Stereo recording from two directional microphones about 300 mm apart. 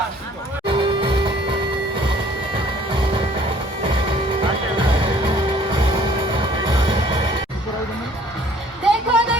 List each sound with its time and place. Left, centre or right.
0.7 s music: centre
2.9 s music: centre
8.8 s music: centre